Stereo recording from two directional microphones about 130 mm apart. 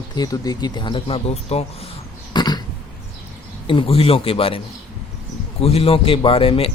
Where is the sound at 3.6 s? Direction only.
40° left (ahead or behind).